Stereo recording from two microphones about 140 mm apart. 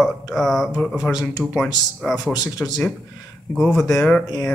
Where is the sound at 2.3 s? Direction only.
25° left (ahead or behind).